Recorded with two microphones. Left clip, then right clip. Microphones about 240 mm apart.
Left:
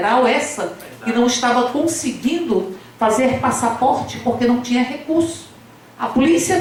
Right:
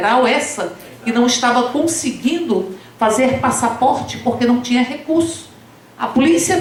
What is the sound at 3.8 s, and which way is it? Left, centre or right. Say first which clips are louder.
Speech: right 1 dB; right.